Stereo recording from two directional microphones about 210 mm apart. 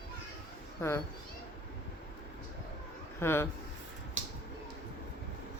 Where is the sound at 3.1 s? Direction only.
10° left (ahead or behind).